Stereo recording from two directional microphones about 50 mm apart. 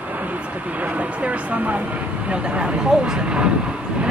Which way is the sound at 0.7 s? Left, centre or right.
Right.